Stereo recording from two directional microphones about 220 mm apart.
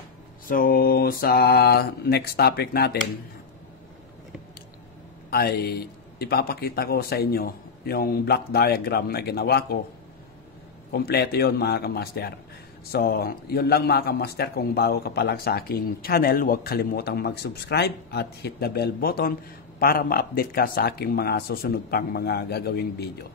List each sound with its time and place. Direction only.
0.5 s a man's voice: 40° left (ahead or behind)
5.3 s a man's voice: 45° left (ahead or behind)
10.9 s a man's voice: 45° left (ahead or behind)